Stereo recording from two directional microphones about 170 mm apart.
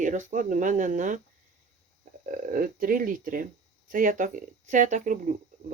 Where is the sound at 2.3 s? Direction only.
55° right (ahead or behind).